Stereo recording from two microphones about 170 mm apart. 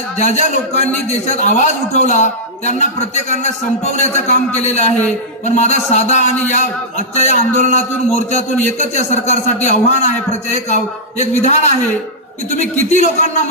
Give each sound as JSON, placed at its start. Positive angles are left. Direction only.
{"t": 0.2, "sound": "a man's voice", "side_deg": 40}
{"t": 11.2, "sound": "a man's voice", "side_deg": 40}
{"t": 12.9, "sound": "a man's voice", "side_deg": 45}